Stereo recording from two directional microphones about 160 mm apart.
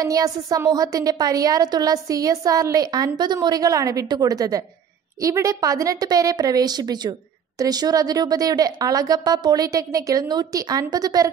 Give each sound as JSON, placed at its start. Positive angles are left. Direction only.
{"t": 0.0, "sound": "a woman's voice", "side_deg": -20}